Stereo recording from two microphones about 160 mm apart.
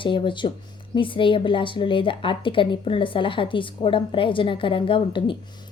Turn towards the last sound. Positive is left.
turn(degrees=30)  # may be behind; listen again after turning